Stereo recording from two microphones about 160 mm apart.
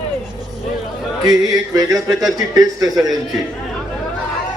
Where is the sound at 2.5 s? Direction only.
20° right (ahead or behind).